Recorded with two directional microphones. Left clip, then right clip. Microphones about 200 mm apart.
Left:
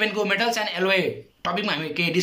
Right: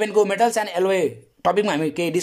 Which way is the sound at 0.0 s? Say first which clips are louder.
Right 4 dB; 35° right (ahead or behind).